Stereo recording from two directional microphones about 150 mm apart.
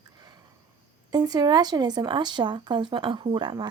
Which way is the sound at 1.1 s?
30° right (ahead or behind).